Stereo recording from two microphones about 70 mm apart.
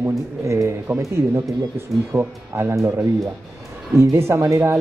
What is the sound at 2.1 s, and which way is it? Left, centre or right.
Speech, right.